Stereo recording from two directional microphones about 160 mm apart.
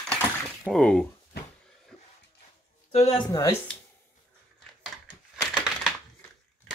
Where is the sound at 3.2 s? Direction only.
20° left (ahead or behind).